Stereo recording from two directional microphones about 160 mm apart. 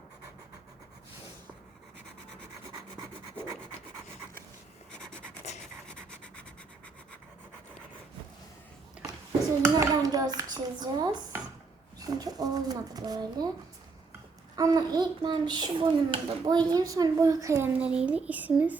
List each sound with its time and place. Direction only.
4.9 s scratch: 5° left (ahead or behind)
5.9 s a sound: 5° left (ahead or behind)
9.6 s a child's voice: 20° right (ahead or behind)
14.5 s a child's voice: 25° right (ahead or behind)
17.7 s speech: 10° right (ahead or behind)